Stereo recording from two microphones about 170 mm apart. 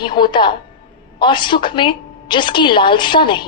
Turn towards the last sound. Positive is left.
turn(degrees=30)  # may be behind; listen again after turning